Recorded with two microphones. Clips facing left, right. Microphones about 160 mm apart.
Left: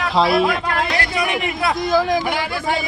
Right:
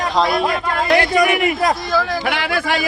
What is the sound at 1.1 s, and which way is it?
Speech, 40° right (ahead or behind).